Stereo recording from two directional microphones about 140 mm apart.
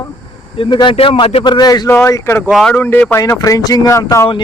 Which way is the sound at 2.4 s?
Centre (ahead or behind).